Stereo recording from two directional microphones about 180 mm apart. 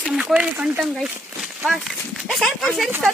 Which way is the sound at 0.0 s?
Centre (ahead or behind).